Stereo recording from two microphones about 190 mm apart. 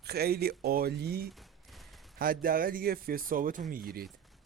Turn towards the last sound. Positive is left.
turn(degrees=-50)  # may be behind; listen again after turning